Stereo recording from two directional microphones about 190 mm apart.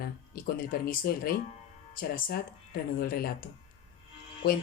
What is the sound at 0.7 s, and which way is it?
Speech, 50° left (ahead or behind).